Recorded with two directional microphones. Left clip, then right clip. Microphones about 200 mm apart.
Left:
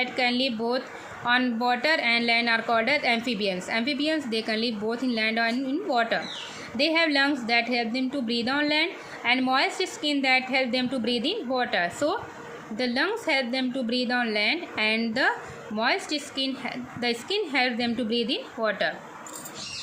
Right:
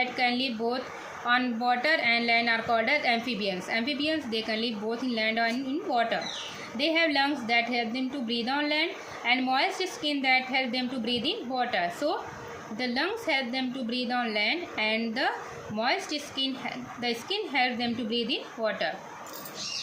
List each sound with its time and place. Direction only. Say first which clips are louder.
0.0 s a woman's voice: left 2 dB; 35° left (ahead or behind)